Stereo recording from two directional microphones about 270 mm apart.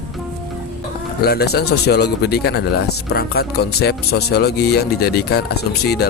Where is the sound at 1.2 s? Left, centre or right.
Left.